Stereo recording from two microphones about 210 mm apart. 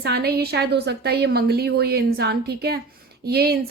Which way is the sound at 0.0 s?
50° right (ahead or behind).